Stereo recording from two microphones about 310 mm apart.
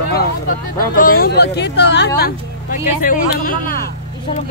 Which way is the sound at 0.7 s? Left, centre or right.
Left.